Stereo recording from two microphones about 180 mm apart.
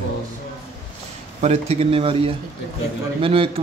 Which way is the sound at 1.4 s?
35° right (ahead or behind).